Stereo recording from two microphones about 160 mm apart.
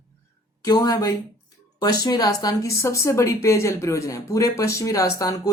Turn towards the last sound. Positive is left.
turn(degrees=20)  # may be behind; listen again after turning